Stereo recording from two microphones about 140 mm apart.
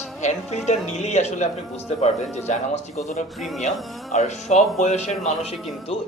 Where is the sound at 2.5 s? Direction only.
60° left (ahead or behind).